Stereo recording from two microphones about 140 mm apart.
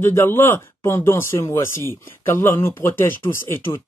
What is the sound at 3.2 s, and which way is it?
Speech, 35° left (ahead or behind).